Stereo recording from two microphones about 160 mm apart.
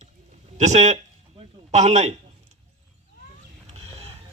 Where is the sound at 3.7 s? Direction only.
40° right (ahead or behind).